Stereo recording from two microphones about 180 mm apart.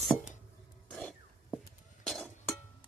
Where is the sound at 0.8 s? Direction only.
5° left (ahead or behind).